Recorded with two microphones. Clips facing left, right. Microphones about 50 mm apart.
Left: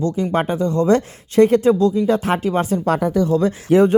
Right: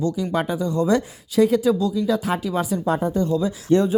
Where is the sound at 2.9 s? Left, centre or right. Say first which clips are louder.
Left 4 dB; left.